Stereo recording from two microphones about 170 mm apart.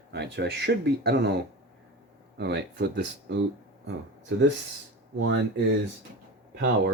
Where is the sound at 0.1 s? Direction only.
80° right.